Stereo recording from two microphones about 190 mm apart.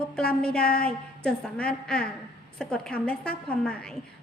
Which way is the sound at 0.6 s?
50° left (ahead or behind).